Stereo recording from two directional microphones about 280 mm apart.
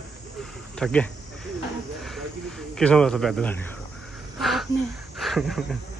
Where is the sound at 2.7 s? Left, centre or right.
Centre.